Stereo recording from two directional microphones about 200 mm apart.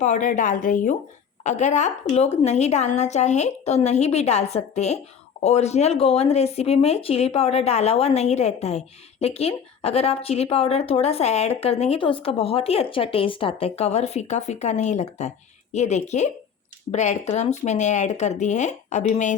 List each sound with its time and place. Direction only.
0.0 s a woman's voice: 40° left (ahead or behind)